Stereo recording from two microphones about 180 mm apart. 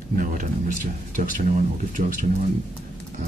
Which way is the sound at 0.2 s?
45° right (ahead or behind).